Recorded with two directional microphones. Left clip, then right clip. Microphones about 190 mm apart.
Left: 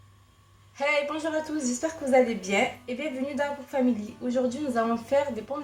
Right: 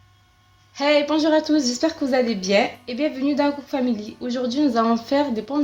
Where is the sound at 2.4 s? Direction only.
40° right (ahead or behind).